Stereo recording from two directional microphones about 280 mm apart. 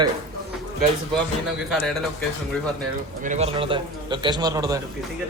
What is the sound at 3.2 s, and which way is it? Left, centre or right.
A man's voice, right.